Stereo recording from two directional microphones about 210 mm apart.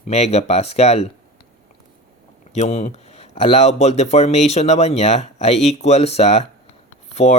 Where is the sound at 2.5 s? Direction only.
30° left (ahead or behind).